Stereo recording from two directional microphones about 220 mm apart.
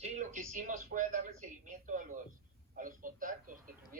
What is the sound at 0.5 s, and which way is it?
Speech, 35° right (ahead or behind).